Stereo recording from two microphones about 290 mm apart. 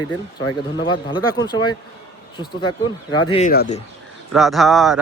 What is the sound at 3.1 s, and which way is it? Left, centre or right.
Speech, centre.